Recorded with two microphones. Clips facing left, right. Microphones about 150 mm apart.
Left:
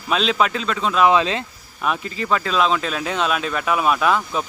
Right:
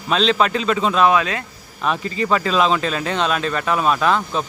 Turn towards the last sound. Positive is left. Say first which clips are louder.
# right 1 dB
turn(degrees=5)  # may be behind; listen again after turning